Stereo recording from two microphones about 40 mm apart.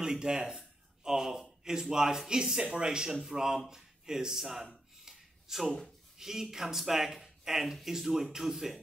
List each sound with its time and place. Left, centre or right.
0.0 s speech: centre
5.0 s a sound: centre
6.1 s speech: centre